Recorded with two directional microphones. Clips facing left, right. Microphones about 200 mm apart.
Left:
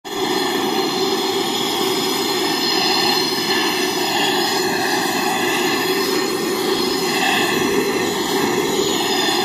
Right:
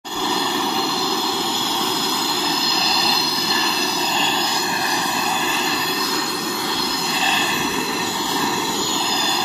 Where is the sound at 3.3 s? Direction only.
20° left (ahead or behind).